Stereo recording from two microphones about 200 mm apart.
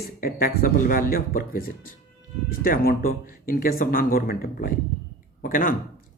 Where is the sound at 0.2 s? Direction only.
45° left (ahead or behind).